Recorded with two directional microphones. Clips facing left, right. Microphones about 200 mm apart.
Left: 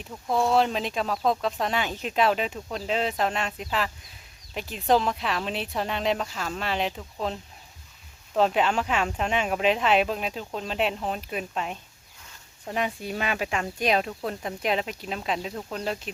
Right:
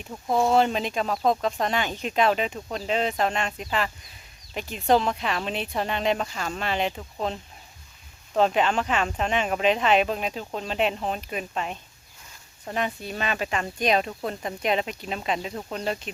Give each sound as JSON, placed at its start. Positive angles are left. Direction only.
{"t": 0.1, "sound": "speech", "side_deg": -20}
{"t": 0.4, "sound": "speech", "side_deg": 0}